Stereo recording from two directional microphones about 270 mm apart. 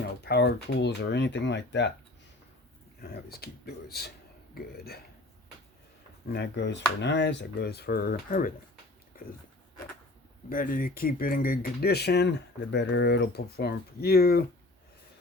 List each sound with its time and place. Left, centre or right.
0.2 s speech: left
3.0 s speech: left
6.2 s speech: left
10.5 s speech: left